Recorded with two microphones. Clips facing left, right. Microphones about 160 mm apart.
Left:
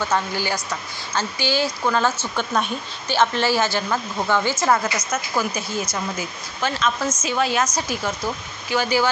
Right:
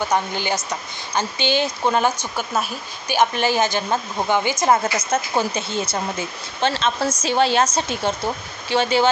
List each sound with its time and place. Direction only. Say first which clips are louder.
0.0 s speech: right 1 dB; 20° right (ahead or behind)